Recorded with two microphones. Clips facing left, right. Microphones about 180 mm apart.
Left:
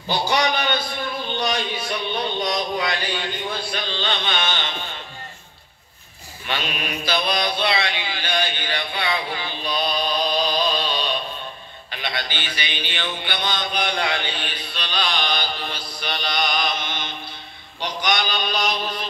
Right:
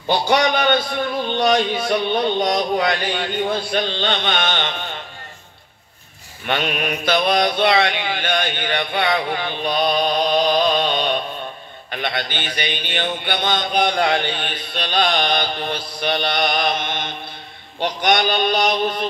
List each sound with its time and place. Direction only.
0.1 s mantra: 50° right (ahead or behind)
3.7 s music: 55° right (ahead or behind)
6.4 s mantra: 55° right (ahead or behind)